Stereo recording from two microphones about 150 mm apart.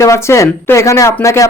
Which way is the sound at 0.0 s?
20° left (ahead or behind).